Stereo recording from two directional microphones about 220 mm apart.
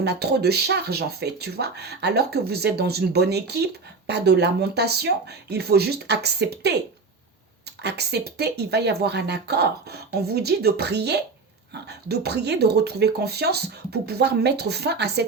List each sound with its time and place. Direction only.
0.0 s speech: 50° right (ahead or behind)
7.8 s speech: 50° right (ahead or behind)